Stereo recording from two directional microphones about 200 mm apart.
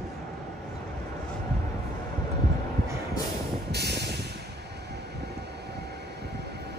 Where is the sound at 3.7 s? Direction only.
55° right (ahead or behind).